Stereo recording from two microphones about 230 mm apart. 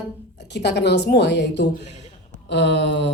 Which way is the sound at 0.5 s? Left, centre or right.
Left.